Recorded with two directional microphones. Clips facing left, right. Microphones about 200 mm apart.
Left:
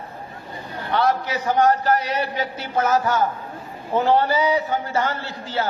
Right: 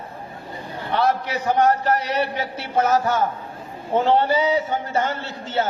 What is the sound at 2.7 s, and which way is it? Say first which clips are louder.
A man's voice: right 1 dB; 30° right (ahead or behind).